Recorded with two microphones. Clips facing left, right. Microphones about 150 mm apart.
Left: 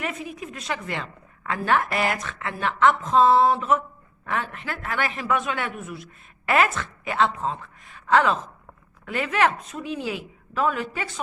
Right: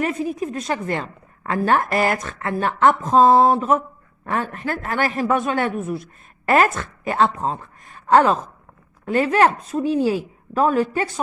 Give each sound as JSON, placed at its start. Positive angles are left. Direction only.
{"t": 0.0, "sound": "a man's voice", "side_deg": -40}